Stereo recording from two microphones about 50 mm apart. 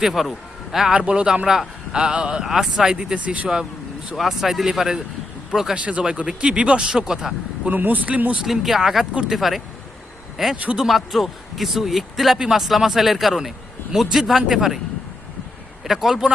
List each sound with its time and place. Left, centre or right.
0.0 s a man's voice: centre
0.9 s speech: centre
3.2 s speech: right
4.1 s speech: centre
5.7 s speech: right
7.7 s speech: right
8.4 s speech: centre
15.8 s speech: centre